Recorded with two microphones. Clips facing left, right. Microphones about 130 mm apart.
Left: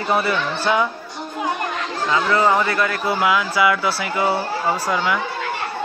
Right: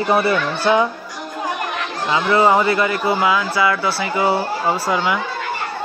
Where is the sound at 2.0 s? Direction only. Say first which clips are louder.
Right 2 dB; 20° right (ahead or behind).